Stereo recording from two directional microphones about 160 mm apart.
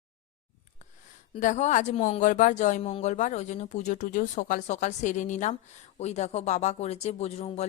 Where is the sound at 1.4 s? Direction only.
50° left (ahead or behind).